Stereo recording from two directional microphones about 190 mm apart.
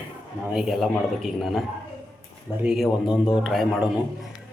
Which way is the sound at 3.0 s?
20° left (ahead or behind).